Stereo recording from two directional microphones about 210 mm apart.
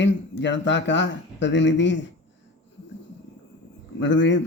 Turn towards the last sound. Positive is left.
turn(degrees=60)  # may be behind; listen again after turning